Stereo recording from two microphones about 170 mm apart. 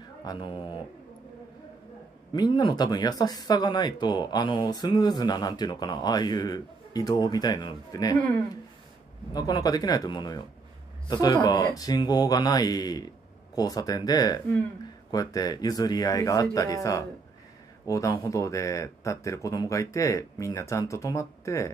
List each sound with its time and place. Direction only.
0.2 s speech: 25° left (ahead or behind)
2.3 s speech: 25° left (ahead or behind)
9.3 s speech: 25° left (ahead or behind)